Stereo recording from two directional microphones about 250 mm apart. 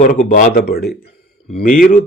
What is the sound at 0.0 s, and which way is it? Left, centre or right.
A man's voice, left.